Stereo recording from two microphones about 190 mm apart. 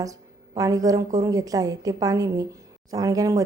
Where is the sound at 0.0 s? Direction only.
20° right (ahead or behind).